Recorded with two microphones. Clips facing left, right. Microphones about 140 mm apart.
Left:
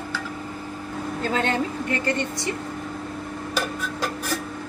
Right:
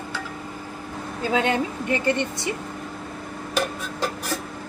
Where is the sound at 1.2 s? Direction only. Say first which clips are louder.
Right 2 dB; 10° right (ahead or behind).